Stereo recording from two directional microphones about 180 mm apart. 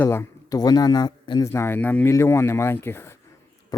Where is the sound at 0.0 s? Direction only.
15° left (ahead or behind).